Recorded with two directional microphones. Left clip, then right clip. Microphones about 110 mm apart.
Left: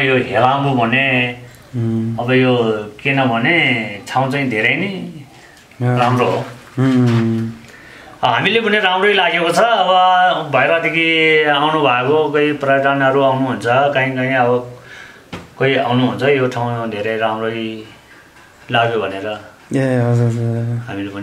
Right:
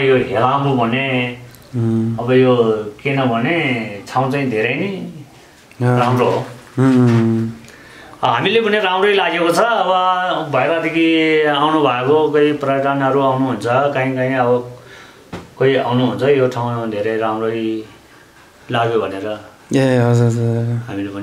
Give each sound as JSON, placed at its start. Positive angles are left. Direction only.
{"t": 0.1, "sound": "speech", "side_deg": 0}
{"t": 2.3, "sound": "speech", "side_deg": 0}
{"t": 5.9, "sound": "a man's voice", "side_deg": -10}
{"t": 8.2, "sound": "a man's voice", "side_deg": -15}
{"t": 15.6, "sound": "a man's voice", "side_deg": -5}
{"t": 19.8, "sound": "a man's voice", "side_deg": -20}